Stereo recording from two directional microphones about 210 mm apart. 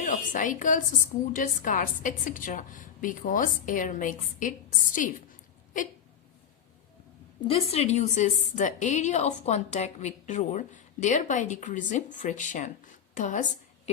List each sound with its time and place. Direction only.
0.0 s a woman's voice: 35° left (ahead or behind)
7.4 s a woman's voice: 30° left (ahead or behind)